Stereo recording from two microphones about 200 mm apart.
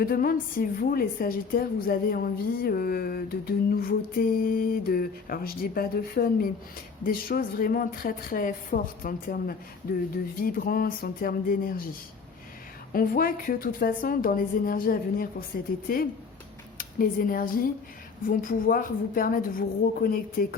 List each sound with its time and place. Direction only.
0.0 s a woman's voice: 45° left (ahead or behind)
12.9 s a woman's voice: 45° left (ahead or behind)